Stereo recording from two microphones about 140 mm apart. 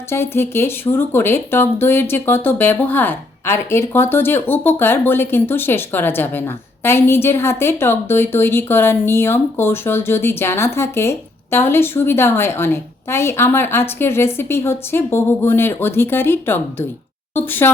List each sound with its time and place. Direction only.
0.1 s speech: 15° left (ahead or behind)